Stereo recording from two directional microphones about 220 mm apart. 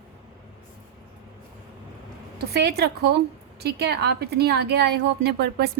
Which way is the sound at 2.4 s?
45° right (ahead or behind).